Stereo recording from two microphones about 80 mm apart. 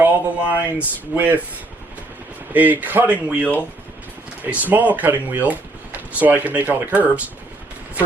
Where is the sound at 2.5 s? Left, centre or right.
Right.